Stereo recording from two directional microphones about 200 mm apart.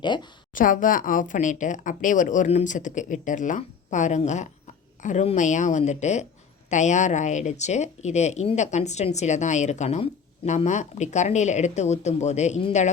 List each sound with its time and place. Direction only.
0.0 s a woman's voice: 20° left (ahead or behind)
0.5 s speech: 40° left (ahead or behind)